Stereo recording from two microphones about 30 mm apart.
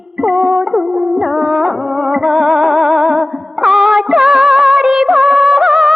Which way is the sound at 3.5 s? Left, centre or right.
Centre.